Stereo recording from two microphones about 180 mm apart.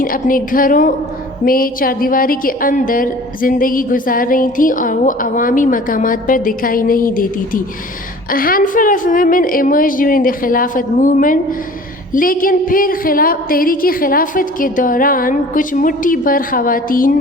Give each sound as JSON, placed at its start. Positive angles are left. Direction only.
{"t": 0.0, "sound": "a woman's voice", "side_deg": 50}